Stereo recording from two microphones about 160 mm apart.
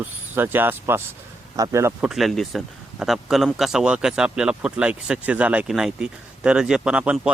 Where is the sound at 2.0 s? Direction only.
Centre (ahead or behind).